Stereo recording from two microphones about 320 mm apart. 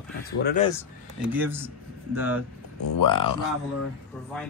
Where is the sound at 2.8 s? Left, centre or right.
Left.